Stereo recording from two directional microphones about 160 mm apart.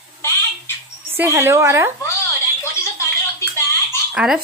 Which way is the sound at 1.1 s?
15° right (ahead or behind).